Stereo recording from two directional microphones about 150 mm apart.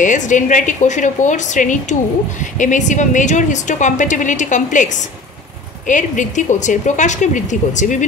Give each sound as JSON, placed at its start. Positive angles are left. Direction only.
{"t": 0.0, "sound": "a woman's voice", "side_deg": 55}
{"t": 5.9, "sound": "a woman's voice", "side_deg": 55}